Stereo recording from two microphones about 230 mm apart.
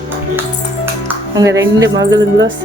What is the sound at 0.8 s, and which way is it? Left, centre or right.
Music, centre.